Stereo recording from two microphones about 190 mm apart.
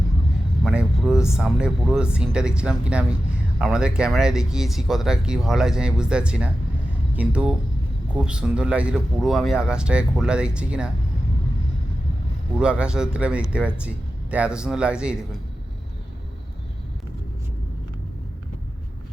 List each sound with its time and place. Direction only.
0.6 s speech: 5° right (ahead or behind)
12.5 s speech: 5° right (ahead or behind)